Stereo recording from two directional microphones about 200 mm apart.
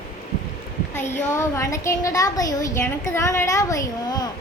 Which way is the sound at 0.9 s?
10° left (ahead or behind).